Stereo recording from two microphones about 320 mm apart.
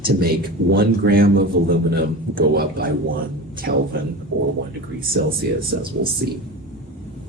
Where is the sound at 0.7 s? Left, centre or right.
Right.